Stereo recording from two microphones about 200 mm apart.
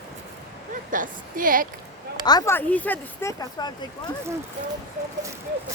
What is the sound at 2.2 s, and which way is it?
Speech, 20° left (ahead or behind).